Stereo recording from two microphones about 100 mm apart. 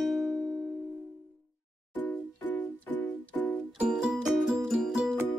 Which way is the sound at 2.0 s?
20° left (ahead or behind).